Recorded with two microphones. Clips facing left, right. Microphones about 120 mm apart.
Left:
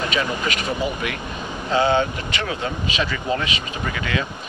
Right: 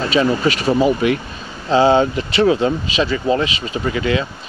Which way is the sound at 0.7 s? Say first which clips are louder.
Right 14 dB; 30° right (ahead or behind).